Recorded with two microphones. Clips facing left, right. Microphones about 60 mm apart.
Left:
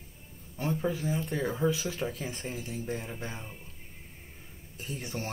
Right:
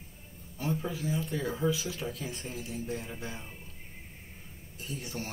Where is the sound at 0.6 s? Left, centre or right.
Left.